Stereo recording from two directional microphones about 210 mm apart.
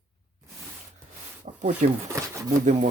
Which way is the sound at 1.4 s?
35° right (ahead or behind).